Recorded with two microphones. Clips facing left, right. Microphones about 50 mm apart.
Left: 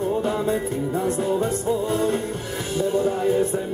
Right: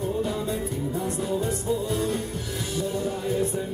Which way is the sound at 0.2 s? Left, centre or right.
Left.